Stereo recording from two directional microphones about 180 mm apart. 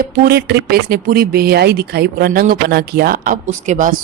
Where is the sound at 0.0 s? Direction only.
55° right (ahead or behind).